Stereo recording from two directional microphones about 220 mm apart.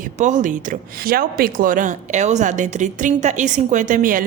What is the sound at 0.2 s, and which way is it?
Speech, 35° right (ahead or behind).